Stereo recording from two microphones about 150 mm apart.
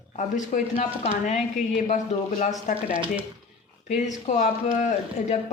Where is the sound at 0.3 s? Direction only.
60° left (ahead or behind).